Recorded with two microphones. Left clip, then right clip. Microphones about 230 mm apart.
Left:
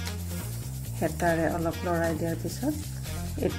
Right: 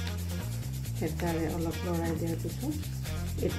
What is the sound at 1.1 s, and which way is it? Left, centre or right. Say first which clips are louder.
Speech: left 7 dB; centre.